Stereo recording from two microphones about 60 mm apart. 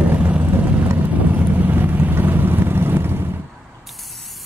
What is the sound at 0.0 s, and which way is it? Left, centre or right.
Vehicle, right.